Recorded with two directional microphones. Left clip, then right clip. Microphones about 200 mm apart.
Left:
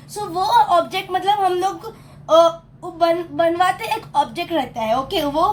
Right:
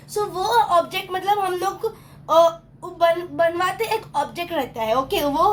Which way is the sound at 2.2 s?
15° right (ahead or behind).